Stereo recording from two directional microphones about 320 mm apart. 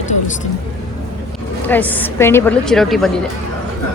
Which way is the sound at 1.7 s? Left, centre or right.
Centre.